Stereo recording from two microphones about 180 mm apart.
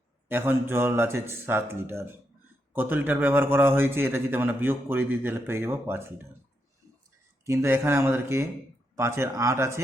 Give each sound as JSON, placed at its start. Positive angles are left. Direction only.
{"t": 0.3, "sound": "a man's voice", "side_deg": -10}
{"t": 7.4, "sound": "a man's voice", "side_deg": -15}